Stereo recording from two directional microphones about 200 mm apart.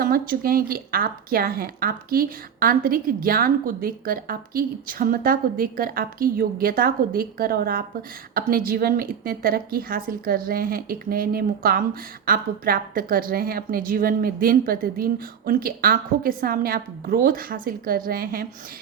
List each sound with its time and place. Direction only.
0.0 s a woman's voice: 45° right (ahead or behind)